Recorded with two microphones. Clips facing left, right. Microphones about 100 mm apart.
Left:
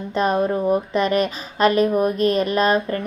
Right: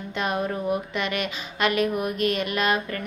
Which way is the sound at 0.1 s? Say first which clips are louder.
Left 7 dB; 35° left (ahead or behind).